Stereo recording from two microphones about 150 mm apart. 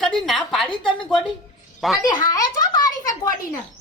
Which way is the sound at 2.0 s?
25° left (ahead or behind).